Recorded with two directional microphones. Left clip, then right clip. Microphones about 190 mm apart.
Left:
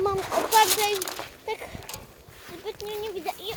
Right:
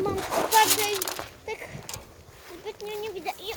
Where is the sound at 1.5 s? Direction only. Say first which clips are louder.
Left 4 dB; 15° left (ahead or behind).